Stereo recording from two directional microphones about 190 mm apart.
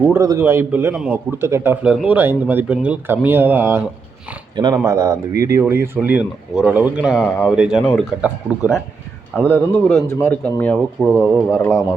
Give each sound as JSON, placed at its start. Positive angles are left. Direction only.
{"t": 0.0, "sound": "a man's voice", "side_deg": -15}
{"t": 9.4, "sound": "speech", "side_deg": 10}